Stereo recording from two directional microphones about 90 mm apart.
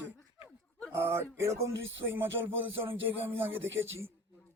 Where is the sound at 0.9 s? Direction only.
25° right (ahead or behind).